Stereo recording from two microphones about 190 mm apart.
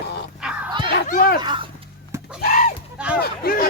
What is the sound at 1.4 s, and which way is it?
Speech, 25° right (ahead or behind).